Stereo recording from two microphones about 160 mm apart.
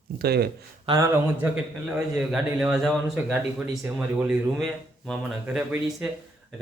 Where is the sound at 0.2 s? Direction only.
80° right.